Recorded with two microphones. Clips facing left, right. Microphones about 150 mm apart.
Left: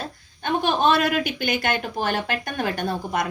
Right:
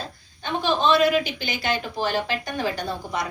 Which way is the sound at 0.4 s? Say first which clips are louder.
Left 2 dB; 50° left (ahead or behind).